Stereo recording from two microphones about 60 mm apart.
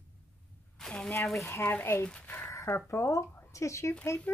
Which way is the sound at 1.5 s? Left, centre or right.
Left.